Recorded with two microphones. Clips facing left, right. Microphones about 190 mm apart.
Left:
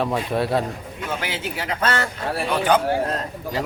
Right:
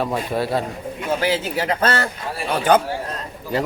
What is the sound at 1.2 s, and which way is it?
A man's voice, 35° right (ahead or behind).